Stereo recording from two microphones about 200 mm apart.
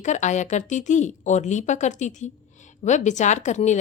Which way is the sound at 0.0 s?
35° left (ahead or behind).